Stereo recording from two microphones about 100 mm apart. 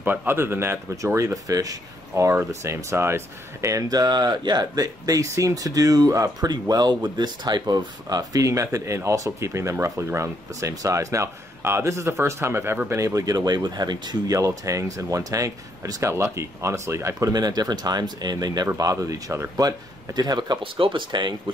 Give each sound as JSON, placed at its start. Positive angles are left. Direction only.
{"t": 0.0, "sound": "speech", "side_deg": -20}
{"t": 12.9, "sound": "speech", "side_deg": -35}
{"t": 20.2, "sound": "speech", "side_deg": -45}